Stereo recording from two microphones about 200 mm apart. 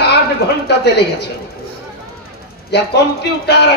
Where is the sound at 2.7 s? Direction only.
55° left (ahead or behind).